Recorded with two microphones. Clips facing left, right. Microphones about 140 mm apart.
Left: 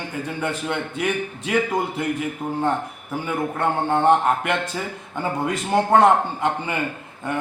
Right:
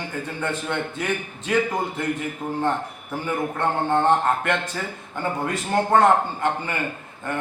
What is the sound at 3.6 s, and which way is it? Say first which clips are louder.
A man's voice: left 1 dB; 15° left (ahead or behind).